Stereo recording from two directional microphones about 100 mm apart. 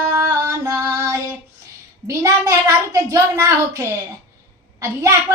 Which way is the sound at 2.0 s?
35° right (ahead or behind).